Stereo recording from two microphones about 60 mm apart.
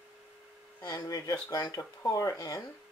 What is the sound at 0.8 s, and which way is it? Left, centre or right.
Speech, left.